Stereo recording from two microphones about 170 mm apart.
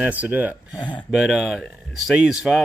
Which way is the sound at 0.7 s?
25° left (ahead or behind).